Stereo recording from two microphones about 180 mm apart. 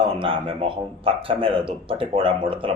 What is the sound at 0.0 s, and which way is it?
Speech, 30° right (ahead or behind).